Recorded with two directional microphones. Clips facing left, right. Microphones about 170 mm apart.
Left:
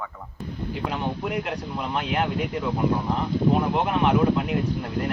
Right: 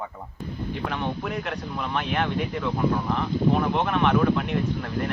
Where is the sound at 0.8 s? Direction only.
15° left (ahead or behind).